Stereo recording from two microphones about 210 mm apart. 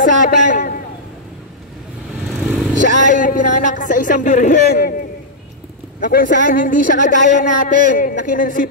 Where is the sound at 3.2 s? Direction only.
40° left (ahead or behind).